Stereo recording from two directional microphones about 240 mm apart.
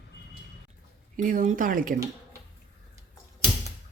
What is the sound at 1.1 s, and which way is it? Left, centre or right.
Speech, right.